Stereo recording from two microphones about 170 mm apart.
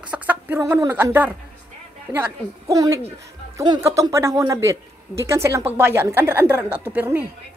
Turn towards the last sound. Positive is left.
turn(degrees=-10)  # may be behind; listen again after turning